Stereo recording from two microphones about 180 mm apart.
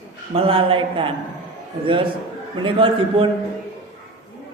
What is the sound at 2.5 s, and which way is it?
Speech, 30° right (ahead or behind).